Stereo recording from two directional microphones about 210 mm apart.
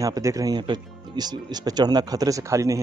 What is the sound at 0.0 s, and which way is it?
Speech, 15° right (ahead or behind).